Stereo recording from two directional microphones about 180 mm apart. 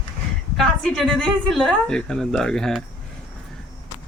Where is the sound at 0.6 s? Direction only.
Centre (ahead or behind).